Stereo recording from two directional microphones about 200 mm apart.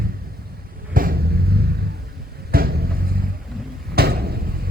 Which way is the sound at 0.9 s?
50° right (ahead or behind).